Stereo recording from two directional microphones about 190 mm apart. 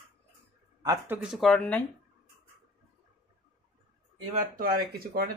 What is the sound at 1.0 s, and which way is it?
Speech, 5° right (ahead or behind).